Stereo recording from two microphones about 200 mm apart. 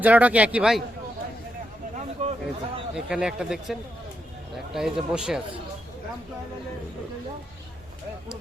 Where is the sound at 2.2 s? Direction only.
35° right (ahead or behind).